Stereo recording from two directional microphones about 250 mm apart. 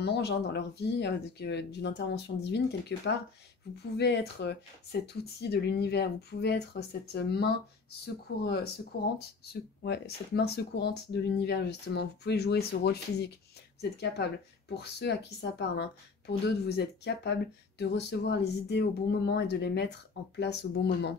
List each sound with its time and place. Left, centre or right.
0.0 s speech: left